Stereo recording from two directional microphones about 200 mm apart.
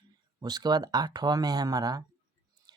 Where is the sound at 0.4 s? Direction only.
20° right (ahead or behind).